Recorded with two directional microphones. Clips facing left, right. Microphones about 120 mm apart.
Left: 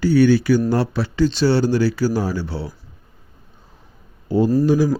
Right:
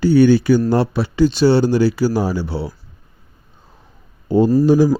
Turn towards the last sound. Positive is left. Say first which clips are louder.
# right 3 dB
turn(degrees=-30)  # may be behind; listen again after turning